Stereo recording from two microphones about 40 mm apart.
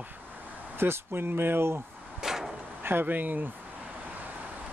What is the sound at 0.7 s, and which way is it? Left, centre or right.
Speech, right.